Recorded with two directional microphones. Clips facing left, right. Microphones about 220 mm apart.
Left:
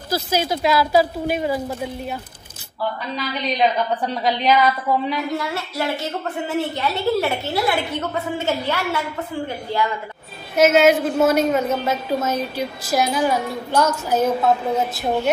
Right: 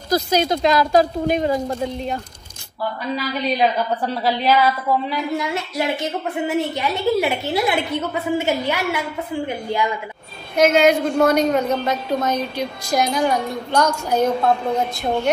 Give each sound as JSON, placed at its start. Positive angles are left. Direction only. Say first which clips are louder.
{"t": 0.1, "sound": "speech", "louder": "right 3 dB", "side_deg": 5}
{"t": 3.4, "sound": "a woman's voice", "louder": "even", "side_deg": -5}
{"t": 5.4, "sound": "a woman's voice", "louder": "right 2 dB", "side_deg": -15}
{"t": 10.5, "sound": "a woman's voice", "louder": "left 1 dB", "side_deg": 5}